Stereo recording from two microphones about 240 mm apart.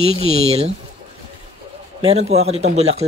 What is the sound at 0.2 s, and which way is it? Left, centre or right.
Speech, right.